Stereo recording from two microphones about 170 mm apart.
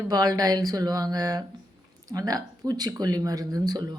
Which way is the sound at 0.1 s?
20° right (ahead or behind).